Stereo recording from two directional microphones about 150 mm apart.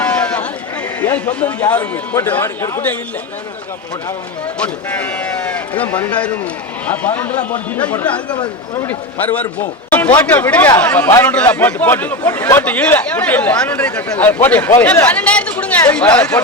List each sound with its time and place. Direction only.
0.0 s a sound: 5° left (ahead or behind)
1.1 s speech: 10° left (ahead or behind)
4.6 s speech: 10° left (ahead or behind)
8.4 s speech: 25° left (ahead or behind)
8.9 s speech: 10° left (ahead or behind)